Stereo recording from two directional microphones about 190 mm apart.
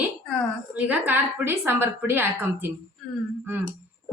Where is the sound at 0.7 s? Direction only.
10° right (ahead or behind).